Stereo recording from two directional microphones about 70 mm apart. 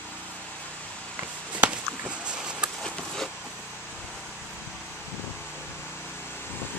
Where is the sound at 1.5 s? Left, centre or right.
Centre.